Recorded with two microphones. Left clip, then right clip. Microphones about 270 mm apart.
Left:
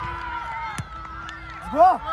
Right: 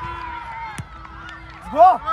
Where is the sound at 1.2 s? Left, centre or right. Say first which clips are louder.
Left 1 dB; left.